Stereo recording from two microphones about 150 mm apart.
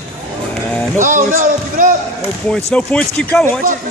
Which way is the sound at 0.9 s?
60° right (ahead or behind).